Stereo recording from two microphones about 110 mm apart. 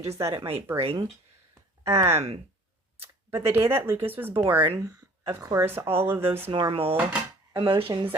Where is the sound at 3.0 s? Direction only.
20° right (ahead or behind).